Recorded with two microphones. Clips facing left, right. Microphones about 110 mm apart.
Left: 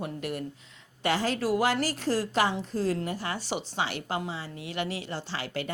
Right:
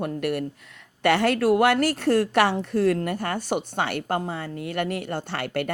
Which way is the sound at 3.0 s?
55° right (ahead or behind).